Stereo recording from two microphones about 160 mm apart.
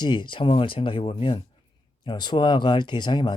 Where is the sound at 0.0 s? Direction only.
30° left (ahead or behind).